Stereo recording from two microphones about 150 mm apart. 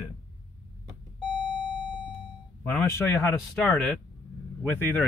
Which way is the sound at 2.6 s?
15° left (ahead or behind).